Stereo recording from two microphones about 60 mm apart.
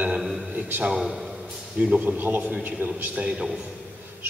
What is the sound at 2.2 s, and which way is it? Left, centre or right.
Speech, right.